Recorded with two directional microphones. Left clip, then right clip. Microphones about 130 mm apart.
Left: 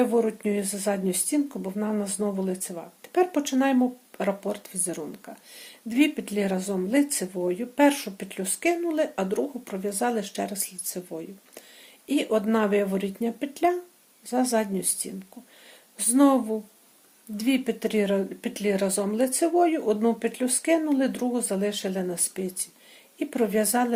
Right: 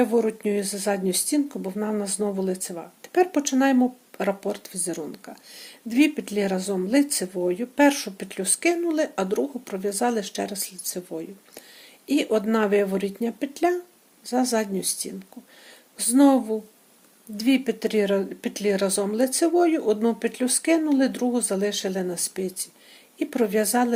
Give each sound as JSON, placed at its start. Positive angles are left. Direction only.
{"t": 0.0, "sound": "speech", "side_deg": -25}